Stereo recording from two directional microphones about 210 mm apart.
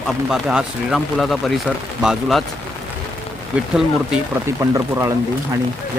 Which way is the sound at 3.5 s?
5° right (ahead or behind).